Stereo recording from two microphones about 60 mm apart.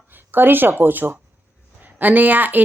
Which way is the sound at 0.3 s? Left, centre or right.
Right.